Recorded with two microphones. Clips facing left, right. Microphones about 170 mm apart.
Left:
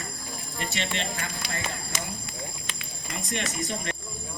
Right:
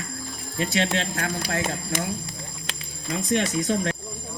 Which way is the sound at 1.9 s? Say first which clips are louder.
Right 8 dB; 55° right (ahead or behind).